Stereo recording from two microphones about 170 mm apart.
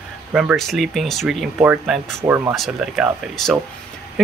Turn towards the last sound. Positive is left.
turn(degrees=0)  # may be behind; listen again after turning